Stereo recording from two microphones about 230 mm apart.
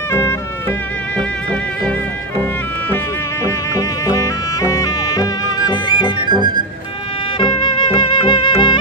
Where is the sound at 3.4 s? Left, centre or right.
Centre.